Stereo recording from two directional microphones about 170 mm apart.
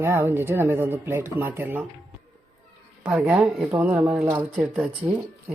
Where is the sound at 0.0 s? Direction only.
15° right (ahead or behind).